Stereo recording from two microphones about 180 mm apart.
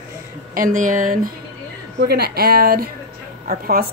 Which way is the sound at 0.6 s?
45° right (ahead or behind).